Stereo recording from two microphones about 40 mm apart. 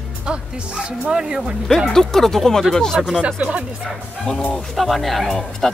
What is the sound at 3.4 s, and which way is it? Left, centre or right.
Speech, right.